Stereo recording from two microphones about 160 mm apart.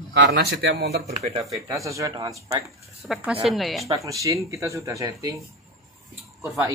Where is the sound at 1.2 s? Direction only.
45° right (ahead or behind).